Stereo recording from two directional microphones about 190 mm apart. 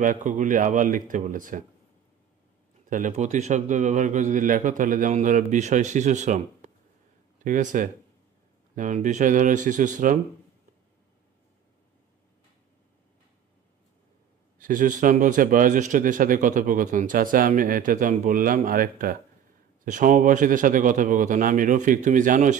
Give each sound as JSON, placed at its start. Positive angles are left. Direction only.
{"t": 0.0, "sound": "speech", "side_deg": -45}
{"t": 2.9, "sound": "a man's voice", "side_deg": -40}
{"t": 14.6, "sound": "speech", "side_deg": -45}